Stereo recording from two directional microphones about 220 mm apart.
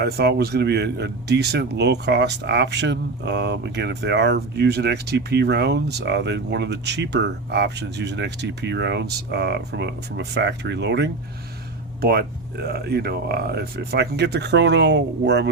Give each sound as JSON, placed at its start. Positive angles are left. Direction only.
{"t": 0.0, "sound": "speech", "side_deg": -50}